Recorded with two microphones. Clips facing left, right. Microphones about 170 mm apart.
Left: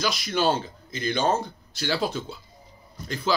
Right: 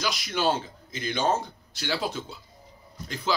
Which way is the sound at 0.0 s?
15° right (ahead or behind).